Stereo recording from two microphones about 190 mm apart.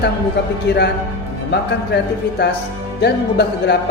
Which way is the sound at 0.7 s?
60° left (ahead or behind).